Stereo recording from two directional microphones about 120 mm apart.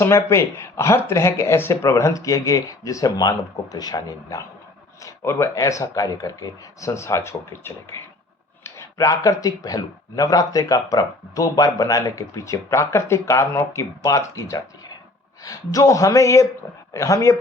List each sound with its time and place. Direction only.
0.0 s speech: 25° left (ahead or behind)